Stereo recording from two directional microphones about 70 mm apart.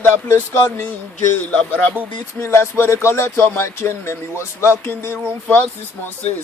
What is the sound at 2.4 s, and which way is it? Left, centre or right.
Speech, left.